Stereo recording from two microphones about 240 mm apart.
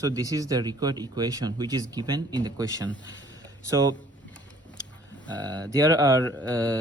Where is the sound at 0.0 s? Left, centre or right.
Centre.